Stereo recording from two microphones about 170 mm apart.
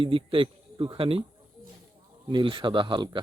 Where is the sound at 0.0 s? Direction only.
30° right (ahead or behind).